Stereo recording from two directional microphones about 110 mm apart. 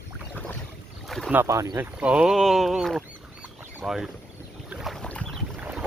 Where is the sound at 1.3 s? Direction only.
25° right (ahead or behind).